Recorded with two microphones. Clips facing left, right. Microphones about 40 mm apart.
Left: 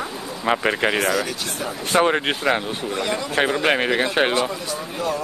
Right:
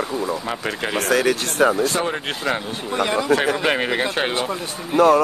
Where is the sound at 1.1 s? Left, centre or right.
Right.